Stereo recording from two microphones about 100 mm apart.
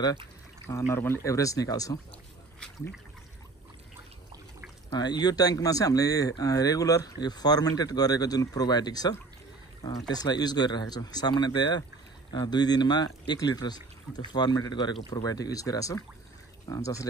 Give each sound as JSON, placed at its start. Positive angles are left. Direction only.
{"t": 0.7, "sound": "speech", "side_deg": 30}
{"t": 4.9, "sound": "speech", "side_deg": 45}